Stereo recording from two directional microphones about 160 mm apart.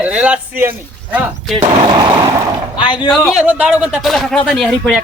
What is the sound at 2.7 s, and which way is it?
Speech, 30° left (ahead or behind).